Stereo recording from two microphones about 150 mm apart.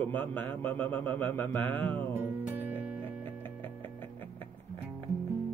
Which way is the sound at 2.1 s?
10° right (ahead or behind).